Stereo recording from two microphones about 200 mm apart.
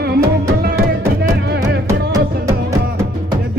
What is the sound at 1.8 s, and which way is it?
Music, 15° right (ahead or behind).